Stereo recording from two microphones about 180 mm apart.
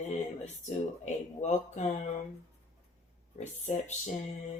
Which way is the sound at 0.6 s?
40° left (ahead or behind).